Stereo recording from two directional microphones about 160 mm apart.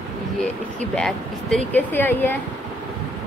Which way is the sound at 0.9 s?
5° left (ahead or behind).